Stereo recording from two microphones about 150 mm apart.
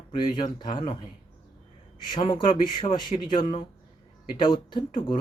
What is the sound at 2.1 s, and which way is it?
A man's voice, 35° left (ahead or behind).